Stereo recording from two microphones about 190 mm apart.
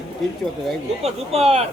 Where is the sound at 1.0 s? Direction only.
35° right (ahead or behind).